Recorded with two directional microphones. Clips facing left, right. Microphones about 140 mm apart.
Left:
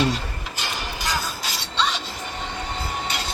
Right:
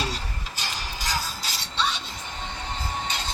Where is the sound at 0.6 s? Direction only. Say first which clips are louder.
Left 4 dB; 65° left (ahead or behind).